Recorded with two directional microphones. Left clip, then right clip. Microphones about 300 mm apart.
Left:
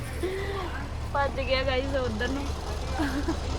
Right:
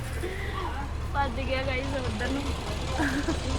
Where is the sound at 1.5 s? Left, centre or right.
Left.